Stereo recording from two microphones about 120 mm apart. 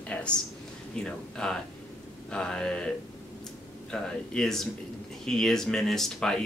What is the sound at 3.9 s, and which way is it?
Speech, 5° left (ahead or behind).